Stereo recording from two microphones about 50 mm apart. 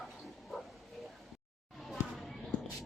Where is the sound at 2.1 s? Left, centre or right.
Centre.